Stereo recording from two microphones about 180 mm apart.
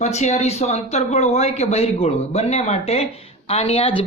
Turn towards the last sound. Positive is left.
turn(degrees=35)  # may be behind; listen again after turning